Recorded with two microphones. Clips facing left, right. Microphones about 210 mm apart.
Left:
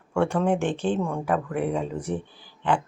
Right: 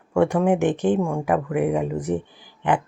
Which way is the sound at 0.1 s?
15° right (ahead or behind).